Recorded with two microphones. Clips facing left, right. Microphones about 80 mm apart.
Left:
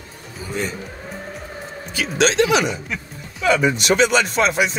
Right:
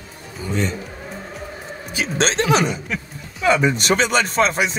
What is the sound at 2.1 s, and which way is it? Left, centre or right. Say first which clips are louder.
Speech: left 2 dB; right.